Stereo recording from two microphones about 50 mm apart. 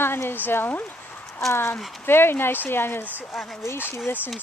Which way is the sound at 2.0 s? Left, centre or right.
Left.